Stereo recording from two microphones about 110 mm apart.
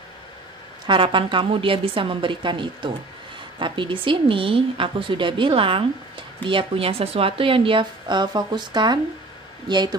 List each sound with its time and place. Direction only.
0.8 s speech: 50° right (ahead or behind)